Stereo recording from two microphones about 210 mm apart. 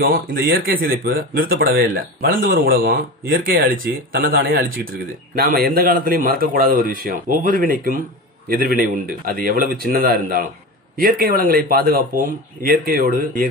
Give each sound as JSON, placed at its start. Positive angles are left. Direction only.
{"t": 0.0, "sound": "speech", "side_deg": -50}